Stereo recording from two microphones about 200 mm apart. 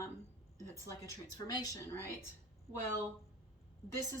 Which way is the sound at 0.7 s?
15° left (ahead or behind).